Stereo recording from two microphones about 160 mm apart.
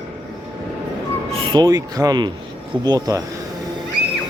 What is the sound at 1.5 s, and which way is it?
Speech, 25° right (ahead or behind).